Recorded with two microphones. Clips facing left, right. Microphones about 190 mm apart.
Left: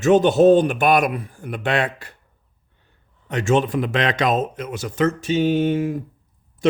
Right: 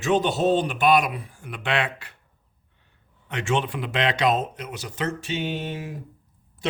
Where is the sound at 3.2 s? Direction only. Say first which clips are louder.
Left 6 dB; 40° left (ahead or behind).